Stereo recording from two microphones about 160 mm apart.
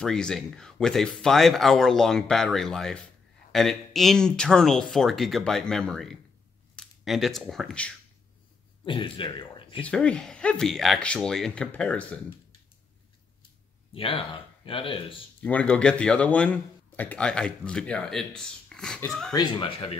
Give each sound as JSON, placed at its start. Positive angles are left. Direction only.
{"t": 0.0, "sound": "speech", "side_deg": 5}
{"t": 8.8, "sound": "speech", "side_deg": 30}
{"t": 9.8, "sound": "speech", "side_deg": 5}
{"t": 13.9, "sound": "speech", "side_deg": 35}
{"t": 15.4, "sound": "speech", "side_deg": 10}
{"t": 19.3, "sound": "speech", "side_deg": 30}